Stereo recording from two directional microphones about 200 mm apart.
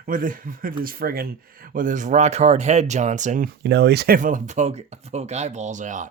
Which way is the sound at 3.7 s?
55° right (ahead or behind).